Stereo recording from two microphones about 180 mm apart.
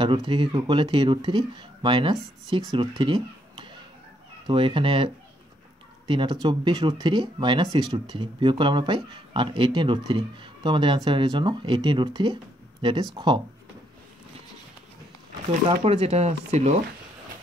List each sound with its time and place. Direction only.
0.0 s speech: 25° right (ahead or behind)
2.7 s a sound: 25° right (ahead or behind)
4.5 s speech: 25° right (ahead or behind)
15.7 s speech: 30° right (ahead or behind)